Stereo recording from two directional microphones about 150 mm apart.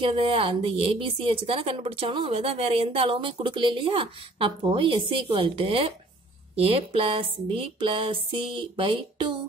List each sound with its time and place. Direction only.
0.0 s a woman's voice: 40° right (ahead or behind)